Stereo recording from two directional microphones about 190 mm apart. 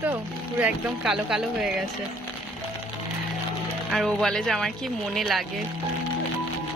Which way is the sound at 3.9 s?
Centre (ahead or behind).